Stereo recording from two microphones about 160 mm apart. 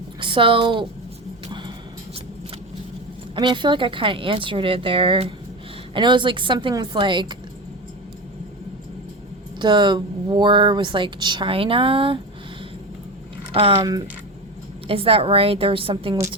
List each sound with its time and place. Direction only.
0.2 s a woman's voice: 30° right (ahead or behind)
1.5 s music: 30° right (ahead or behind)
3.3 s a woman's voice: 30° right (ahead or behind)
9.6 s speech: 30° right (ahead or behind)
13.5 s speech: 35° right (ahead or behind)
13.8 s speech: 25° right (ahead or behind)
14.8 s a woman's voice: 35° right (ahead or behind)